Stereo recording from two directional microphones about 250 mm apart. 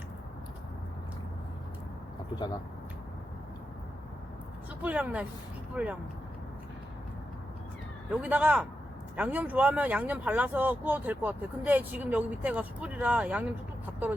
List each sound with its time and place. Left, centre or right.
2.3 s speech: centre
4.8 s speech: centre
8.1 s speech: centre